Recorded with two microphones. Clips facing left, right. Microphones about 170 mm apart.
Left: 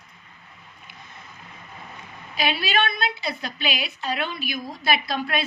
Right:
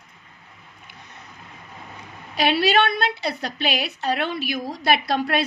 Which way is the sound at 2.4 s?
65° right (ahead or behind).